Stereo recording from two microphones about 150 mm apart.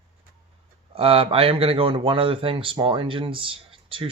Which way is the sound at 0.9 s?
40° right (ahead or behind).